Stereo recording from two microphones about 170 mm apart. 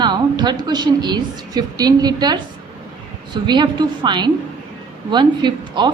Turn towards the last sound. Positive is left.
turn(degrees=-25)  # may be behind; listen again after turning